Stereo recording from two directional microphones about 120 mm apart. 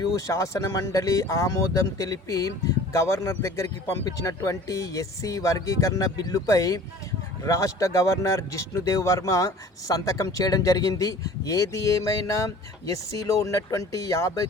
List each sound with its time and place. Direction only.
0.0 s speech: 25° left (ahead or behind)